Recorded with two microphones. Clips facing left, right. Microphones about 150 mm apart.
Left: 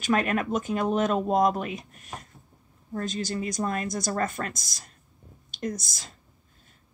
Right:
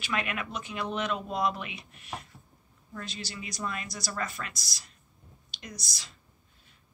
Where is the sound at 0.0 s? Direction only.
40° left (ahead or behind).